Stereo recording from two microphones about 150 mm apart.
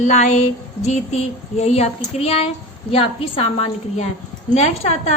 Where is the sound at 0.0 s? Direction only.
50° left (ahead or behind).